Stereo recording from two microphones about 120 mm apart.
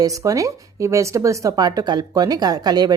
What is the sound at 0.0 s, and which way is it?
Speech, 30° right (ahead or behind).